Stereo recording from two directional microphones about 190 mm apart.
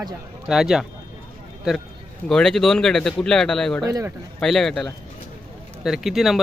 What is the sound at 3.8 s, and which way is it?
Speech, 20° right (ahead or behind).